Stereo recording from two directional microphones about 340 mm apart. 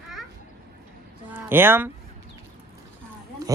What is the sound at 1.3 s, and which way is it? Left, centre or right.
Speech, centre.